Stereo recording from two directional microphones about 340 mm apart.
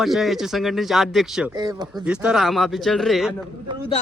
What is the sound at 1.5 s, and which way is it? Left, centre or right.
Speech, centre.